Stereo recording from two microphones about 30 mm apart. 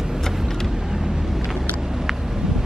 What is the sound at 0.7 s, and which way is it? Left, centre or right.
Vehicle, right.